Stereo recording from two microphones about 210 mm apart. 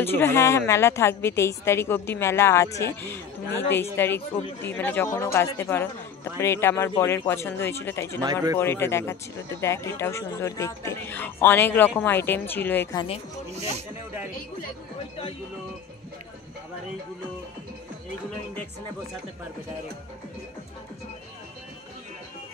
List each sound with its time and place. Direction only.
0.0 s speech: 10° left (ahead or behind)
8.2 s a man's voice: 20° right (ahead or behind)
8.5 s speech: 10° left (ahead or behind)